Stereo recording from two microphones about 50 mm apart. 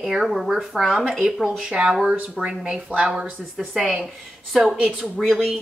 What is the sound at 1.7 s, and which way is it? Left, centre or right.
A woman's voice, centre.